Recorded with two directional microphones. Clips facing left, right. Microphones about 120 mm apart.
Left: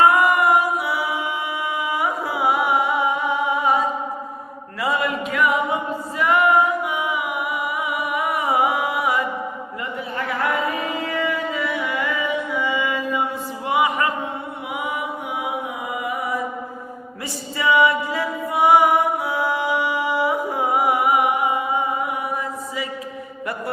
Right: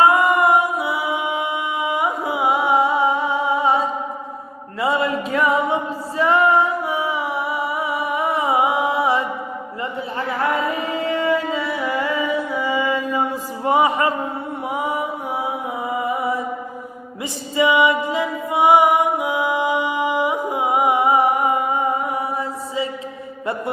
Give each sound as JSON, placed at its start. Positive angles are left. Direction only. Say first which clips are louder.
{"t": 0.0, "sound": "music", "louder": "right 1 dB", "side_deg": -25}
{"t": 4.8, "sound": "a capella", "louder": "right 3 dB", "side_deg": -30}
{"t": 11.0, "sound": "music", "louder": "right 7 dB", "side_deg": -30}
{"t": 16.0, "sound": "mantra", "louder": "right 3 dB", "side_deg": -30}
{"t": 17.6, "sound": "music", "louder": "right 2 dB", "side_deg": -20}
{"t": 21.3, "sound": "music", "louder": "right 2 dB", "side_deg": -45}